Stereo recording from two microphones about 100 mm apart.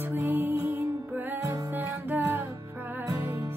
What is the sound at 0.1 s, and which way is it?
Music, 20° right (ahead or behind).